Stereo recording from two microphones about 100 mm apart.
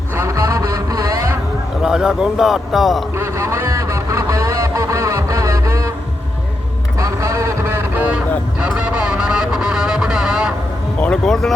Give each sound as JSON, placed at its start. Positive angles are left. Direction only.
{"t": 0.2, "sound": "a sound", "side_deg": -30}
{"t": 1.8, "sound": "a man's voice", "side_deg": -5}
{"t": 3.2, "sound": "vehicle", "side_deg": -30}
{"t": 7.0, "sound": "vehicle", "side_deg": -30}
{"t": 8.6, "sound": "vehicle", "side_deg": -10}
{"t": 11.0, "sound": "speech", "side_deg": 5}